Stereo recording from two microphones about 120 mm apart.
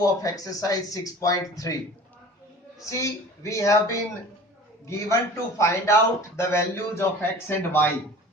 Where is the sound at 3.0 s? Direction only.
25° left (ahead or behind).